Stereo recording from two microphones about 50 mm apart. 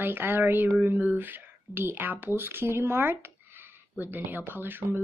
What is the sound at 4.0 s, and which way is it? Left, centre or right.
Speech, right.